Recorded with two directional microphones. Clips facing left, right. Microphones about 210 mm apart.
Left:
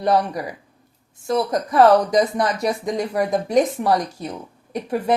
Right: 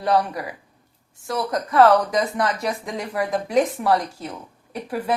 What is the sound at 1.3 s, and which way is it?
Speech, 20° left (ahead or behind).